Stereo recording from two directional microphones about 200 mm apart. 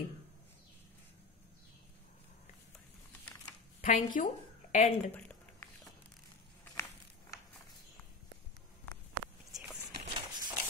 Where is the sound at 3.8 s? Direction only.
40° left (ahead or behind).